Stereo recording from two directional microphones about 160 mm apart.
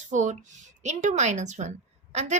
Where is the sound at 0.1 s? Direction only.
50° right (ahead or behind).